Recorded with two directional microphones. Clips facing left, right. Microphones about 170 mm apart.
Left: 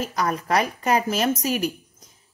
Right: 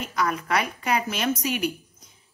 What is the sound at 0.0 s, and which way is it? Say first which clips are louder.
A woman's voice: left 2 dB; 40° left (ahead or behind).